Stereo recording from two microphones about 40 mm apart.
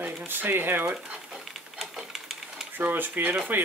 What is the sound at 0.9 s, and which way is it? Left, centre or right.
Speech, right.